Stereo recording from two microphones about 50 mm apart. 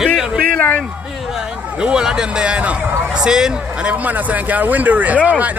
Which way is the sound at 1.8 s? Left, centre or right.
Centre.